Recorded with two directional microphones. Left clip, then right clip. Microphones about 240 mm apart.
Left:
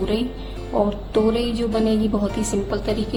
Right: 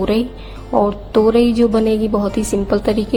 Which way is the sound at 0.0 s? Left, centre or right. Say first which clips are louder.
Right 6 dB; right.